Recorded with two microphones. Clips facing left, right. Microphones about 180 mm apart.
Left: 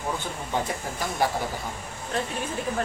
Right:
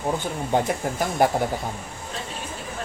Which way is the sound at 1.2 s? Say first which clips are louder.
Right 5 dB; 50° right (ahead or behind).